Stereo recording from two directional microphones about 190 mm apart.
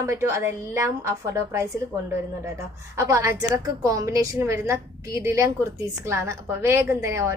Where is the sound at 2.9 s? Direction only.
15° right (ahead or behind).